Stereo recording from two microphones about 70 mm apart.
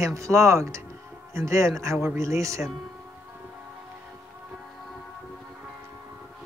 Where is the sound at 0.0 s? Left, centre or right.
Right.